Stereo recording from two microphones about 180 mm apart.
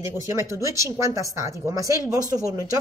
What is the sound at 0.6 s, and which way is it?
A woman's voice, 15° right (ahead or behind).